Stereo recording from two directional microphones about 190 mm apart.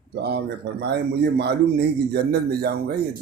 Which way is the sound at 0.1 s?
60° right (ahead or behind).